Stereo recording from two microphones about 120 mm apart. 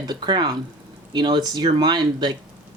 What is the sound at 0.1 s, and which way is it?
Speech, 35° right (ahead or behind).